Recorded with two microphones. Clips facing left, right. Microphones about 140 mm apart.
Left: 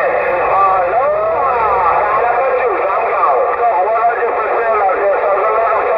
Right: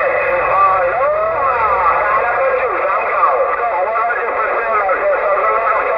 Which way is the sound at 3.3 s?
15° left (ahead or behind).